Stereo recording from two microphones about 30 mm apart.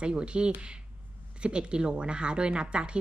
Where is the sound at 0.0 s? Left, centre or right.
Right.